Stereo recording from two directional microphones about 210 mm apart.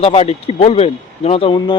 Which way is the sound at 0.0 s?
30° left (ahead or behind).